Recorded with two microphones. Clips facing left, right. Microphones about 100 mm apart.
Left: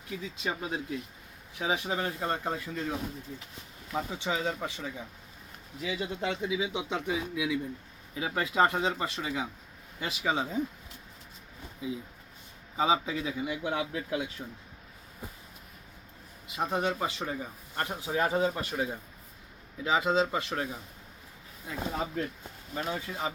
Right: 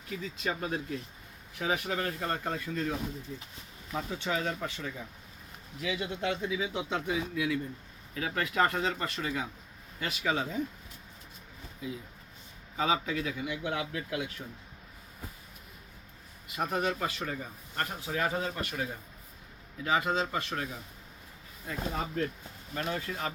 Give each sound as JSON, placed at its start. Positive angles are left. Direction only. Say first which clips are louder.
{"t": 0.1, "sound": "a man's voice", "louder": "even", "side_deg": 10}
{"t": 12.7, "sound": "a man's voice", "louder": "left 2 dB", "side_deg": 15}
{"t": 16.6, "sound": "a man's voice", "louder": "left 1 dB", "side_deg": 20}
{"t": 21.7, "sound": "a man's voice", "louder": "left 1 dB", "side_deg": 10}